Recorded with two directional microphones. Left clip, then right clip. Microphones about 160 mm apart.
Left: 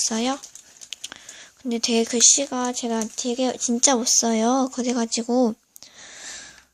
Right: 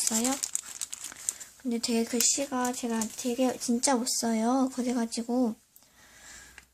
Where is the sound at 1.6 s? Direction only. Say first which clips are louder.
Left 8 dB; 25° left (ahead or behind).